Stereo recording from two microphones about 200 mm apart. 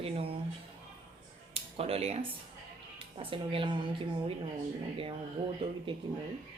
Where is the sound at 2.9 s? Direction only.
25° right (ahead or behind).